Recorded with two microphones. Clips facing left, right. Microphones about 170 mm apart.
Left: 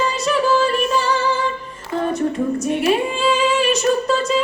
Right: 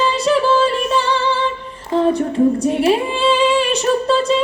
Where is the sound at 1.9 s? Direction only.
30° right (ahead or behind).